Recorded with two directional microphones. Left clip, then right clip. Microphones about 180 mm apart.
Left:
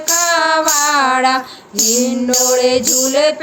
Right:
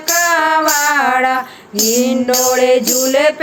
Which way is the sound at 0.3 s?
5° left (ahead or behind).